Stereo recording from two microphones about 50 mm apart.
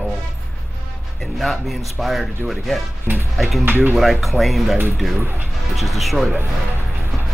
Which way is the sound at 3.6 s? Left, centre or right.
Right.